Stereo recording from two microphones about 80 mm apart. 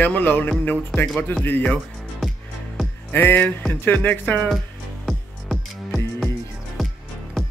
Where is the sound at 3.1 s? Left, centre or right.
Left.